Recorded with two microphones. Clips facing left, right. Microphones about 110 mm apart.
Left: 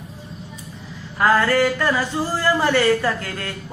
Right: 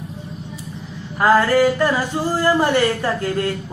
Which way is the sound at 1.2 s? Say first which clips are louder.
Right 3 dB; 15° right (ahead or behind).